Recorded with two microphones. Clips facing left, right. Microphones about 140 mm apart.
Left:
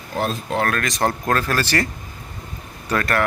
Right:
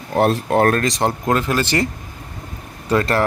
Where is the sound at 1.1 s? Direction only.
20° right (ahead or behind).